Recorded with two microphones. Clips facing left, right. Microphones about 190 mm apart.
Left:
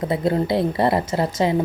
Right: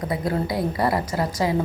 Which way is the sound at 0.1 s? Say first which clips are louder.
Left 5 dB; 25° left (ahead or behind).